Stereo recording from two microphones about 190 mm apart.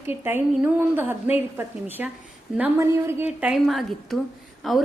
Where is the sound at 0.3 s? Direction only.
10° right (ahead or behind).